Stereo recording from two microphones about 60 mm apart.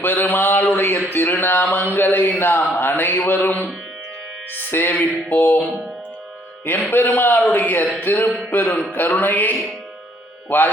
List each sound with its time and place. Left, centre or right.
0.0 s a sound: left
1.7 s mantra: left
4.7 s mantra: left
6.9 s mantra: left
8.4 s a man's voice: left
8.9 s mantra: left